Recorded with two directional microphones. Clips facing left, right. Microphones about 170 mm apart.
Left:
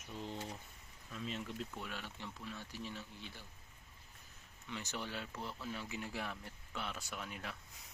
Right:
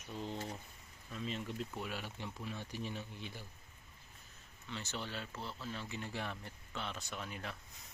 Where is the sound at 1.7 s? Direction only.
10° right (ahead or behind).